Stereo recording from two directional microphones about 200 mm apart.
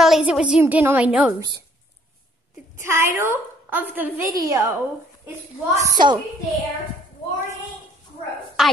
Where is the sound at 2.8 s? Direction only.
10° right (ahead or behind).